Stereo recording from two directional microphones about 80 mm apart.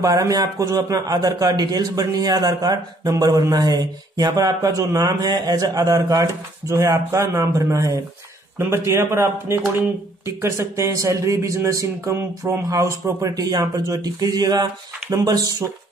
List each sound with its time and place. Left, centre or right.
0.0 s a man's voice: right